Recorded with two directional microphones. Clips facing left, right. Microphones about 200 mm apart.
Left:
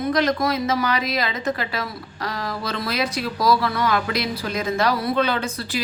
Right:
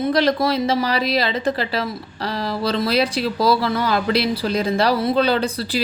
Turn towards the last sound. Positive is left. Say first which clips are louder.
# right 5 dB
turn(degrees=-35)  # may be behind; listen again after turning